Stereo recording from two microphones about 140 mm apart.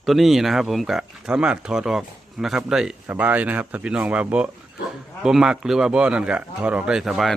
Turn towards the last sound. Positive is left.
turn(degrees=0)  # may be behind; listen again after turning